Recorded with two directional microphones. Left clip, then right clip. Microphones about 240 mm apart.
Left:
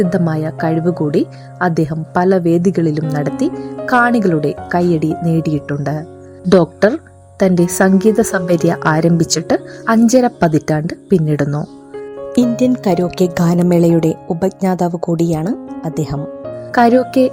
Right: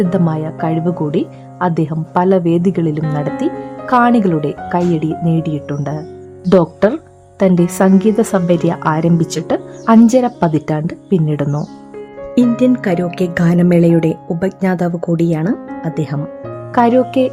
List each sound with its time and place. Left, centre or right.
0.0 s speech: centre